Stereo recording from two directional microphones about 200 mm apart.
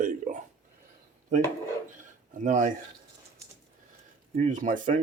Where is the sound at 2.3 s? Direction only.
40° right (ahead or behind).